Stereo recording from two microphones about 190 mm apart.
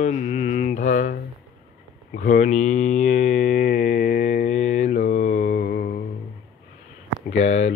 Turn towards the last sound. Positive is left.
turn(degrees=35)  # may be behind; listen again after turning